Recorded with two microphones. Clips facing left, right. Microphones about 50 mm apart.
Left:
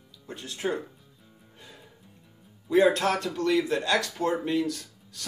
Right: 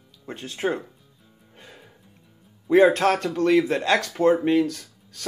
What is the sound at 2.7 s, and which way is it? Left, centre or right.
Speech, right.